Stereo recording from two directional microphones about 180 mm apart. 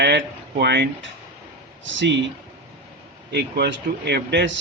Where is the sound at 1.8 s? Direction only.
90° right.